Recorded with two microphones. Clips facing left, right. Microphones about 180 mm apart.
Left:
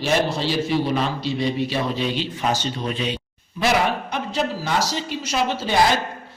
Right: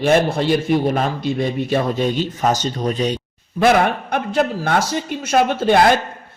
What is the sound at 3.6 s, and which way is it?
A man's voice, 55° right (ahead or behind).